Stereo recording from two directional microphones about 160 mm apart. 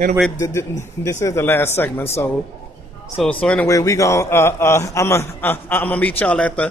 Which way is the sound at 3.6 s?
20° left (ahead or behind).